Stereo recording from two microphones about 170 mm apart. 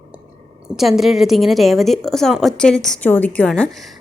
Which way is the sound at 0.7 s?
Centre (ahead or behind).